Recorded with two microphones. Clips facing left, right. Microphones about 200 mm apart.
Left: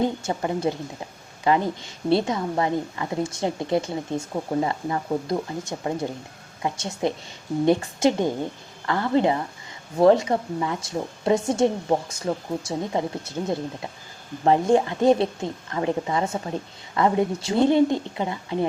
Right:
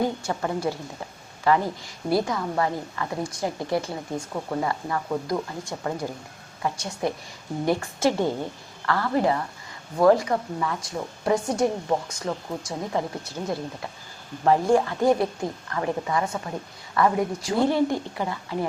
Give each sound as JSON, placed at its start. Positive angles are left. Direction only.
{"t": 0.0, "sound": "a woman's voice", "side_deg": 20}